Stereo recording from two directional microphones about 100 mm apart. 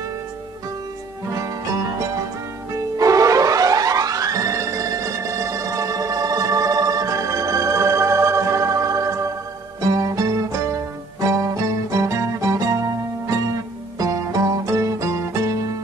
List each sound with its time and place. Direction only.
2.7 s music: 35° right (ahead or behind)
13.9 s music: 35° right (ahead or behind)